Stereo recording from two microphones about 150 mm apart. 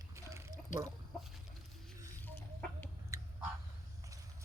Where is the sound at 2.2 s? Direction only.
10° left (ahead or behind).